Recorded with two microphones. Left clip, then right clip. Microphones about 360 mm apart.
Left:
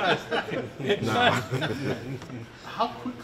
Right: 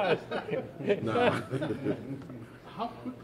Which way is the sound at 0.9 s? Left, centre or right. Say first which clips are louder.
Left 4 dB; right.